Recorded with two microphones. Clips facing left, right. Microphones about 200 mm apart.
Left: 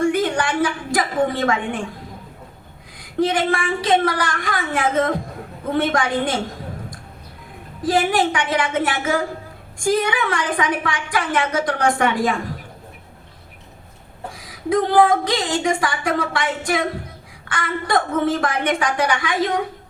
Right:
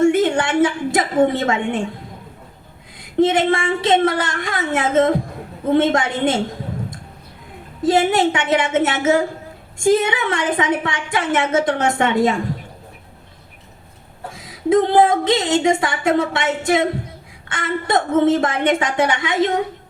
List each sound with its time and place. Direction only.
0.0 s a sound: 25° right (ahead or behind)
3.0 s speech: 25° right (ahead or behind)
7.8 s speech: 25° right (ahead or behind)
14.3 s speech: 25° right (ahead or behind)